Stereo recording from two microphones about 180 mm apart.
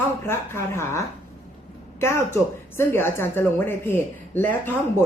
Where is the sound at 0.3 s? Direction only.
15° left (ahead or behind).